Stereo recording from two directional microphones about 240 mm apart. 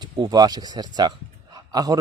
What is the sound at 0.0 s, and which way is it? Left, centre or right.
A man's voice, centre.